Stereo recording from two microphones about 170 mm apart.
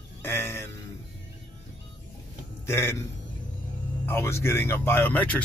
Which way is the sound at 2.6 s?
15° left (ahead or behind).